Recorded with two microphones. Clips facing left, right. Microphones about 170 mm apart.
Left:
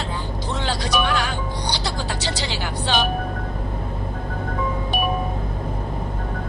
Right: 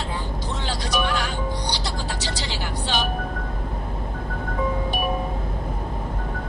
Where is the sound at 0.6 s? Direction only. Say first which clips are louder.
Left 3 dB; 75° left (ahead or behind).